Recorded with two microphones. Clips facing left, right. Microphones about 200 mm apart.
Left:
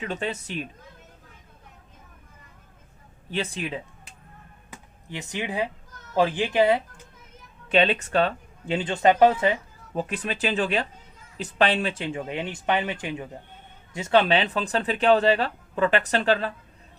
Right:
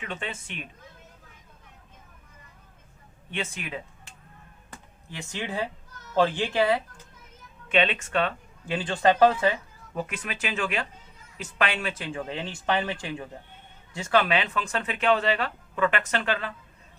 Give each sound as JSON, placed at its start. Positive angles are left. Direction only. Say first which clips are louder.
{"t": 0.0, "sound": "speech", "louder": "left 6 dB", "side_deg": 40}
{"t": 3.2, "sound": "speech", "louder": "left 5 dB", "side_deg": 35}
{"t": 5.1, "sound": "speech", "louder": "left 3 dB", "side_deg": 15}
{"t": 7.7, "sound": "speech", "louder": "left 3 dB", "side_deg": 35}
{"t": 9.9, "sound": "speech", "louder": "left 4 dB", "side_deg": 30}